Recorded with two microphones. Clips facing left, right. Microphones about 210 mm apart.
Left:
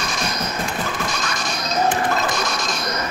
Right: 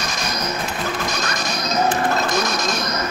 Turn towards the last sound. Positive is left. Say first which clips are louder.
# right 2 dB
turn(degrees=-40)  # may be behind; listen again after turning